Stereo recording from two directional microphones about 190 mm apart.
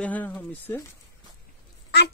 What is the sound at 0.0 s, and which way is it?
Speech, 10° left (ahead or behind).